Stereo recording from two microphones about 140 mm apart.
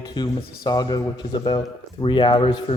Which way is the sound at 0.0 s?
30° left (ahead or behind).